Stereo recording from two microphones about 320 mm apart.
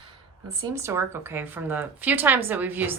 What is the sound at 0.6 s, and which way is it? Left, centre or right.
Speech, centre.